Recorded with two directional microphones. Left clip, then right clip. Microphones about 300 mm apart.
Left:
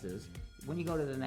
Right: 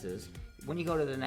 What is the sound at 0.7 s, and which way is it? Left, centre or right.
Speech, centre.